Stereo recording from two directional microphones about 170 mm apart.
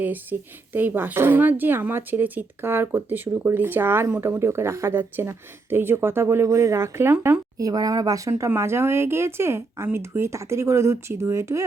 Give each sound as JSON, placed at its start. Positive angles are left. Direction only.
{"t": 0.0, "sound": "speech", "side_deg": -10}